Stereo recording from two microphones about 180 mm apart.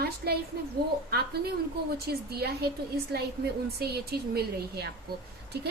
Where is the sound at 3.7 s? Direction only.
60° right (ahead or behind).